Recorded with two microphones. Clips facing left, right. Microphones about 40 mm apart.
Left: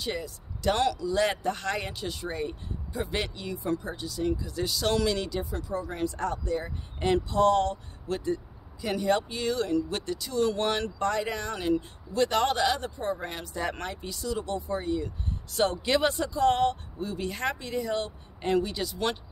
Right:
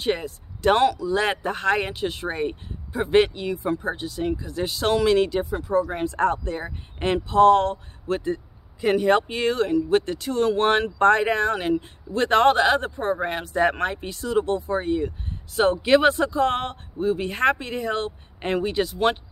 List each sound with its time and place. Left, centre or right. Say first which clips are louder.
0.0 s speech: right 8 dB; right
0.8 s speech: right 4 dB; centre